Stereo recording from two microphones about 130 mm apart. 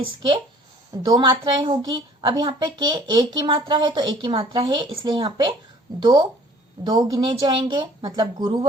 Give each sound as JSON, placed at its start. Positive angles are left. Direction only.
{"t": 0.0, "sound": "a woman's voice", "side_deg": -40}